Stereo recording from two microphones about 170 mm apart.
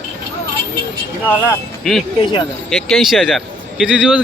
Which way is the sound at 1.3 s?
5° left (ahead or behind).